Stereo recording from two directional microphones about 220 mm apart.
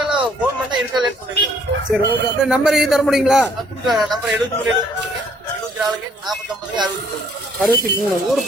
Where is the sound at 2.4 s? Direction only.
5° right (ahead or behind).